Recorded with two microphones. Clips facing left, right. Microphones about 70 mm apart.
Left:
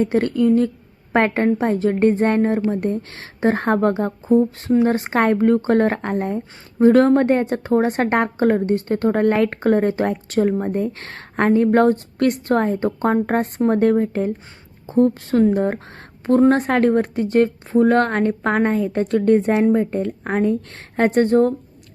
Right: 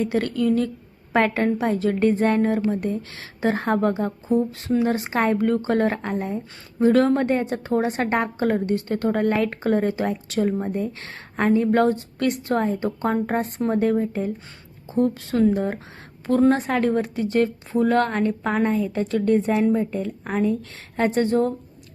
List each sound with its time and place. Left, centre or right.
0.0 s a woman's voice: left
19.6 s speech: left